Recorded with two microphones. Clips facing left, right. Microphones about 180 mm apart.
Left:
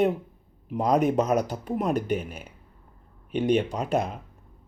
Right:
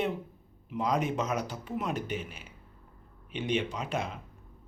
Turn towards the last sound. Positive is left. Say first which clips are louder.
# left 7 dB
turn(degrees=40)  # may be behind; listen again after turning